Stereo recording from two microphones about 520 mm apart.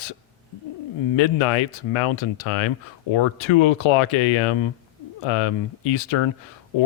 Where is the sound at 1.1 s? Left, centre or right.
Left.